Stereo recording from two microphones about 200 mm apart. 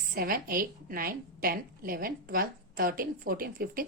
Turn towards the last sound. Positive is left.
turn(degrees=-45)  # may be behind; listen again after turning